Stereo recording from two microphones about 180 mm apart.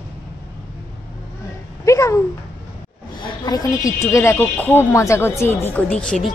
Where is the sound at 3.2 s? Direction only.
20° left (ahead or behind).